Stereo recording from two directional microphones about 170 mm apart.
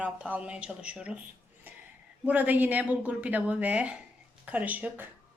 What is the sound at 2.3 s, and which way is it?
Speech, 10° right (ahead or behind).